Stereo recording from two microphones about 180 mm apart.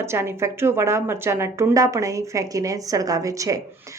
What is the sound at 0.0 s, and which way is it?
A woman's voice, 15° right (ahead or behind).